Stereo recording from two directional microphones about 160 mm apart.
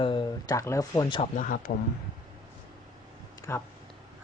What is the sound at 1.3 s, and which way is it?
Speech, 60° left (ahead or behind).